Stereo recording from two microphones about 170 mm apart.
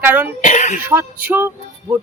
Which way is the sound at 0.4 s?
45° left (ahead or behind).